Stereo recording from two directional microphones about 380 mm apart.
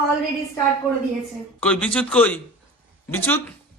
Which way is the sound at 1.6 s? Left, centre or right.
Centre.